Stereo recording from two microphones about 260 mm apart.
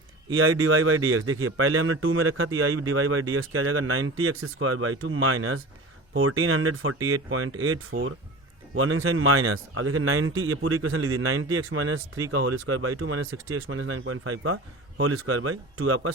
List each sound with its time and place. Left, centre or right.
0.3 s speech: right